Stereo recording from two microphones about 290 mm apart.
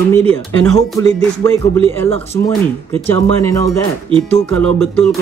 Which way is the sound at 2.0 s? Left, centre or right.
Left.